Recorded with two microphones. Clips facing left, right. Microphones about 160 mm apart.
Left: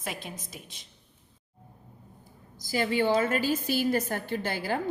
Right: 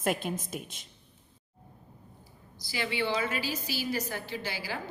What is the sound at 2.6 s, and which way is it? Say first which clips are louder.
A woman's voice: left 6 dB; 45° left (ahead or behind).